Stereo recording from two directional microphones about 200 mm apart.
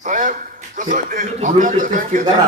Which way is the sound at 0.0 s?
40° right (ahead or behind).